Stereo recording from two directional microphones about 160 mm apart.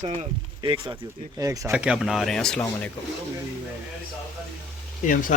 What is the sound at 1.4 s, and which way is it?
Speech, 20° right (ahead or behind).